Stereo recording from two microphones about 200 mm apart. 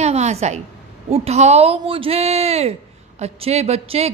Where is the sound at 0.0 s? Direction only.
35° right (ahead or behind).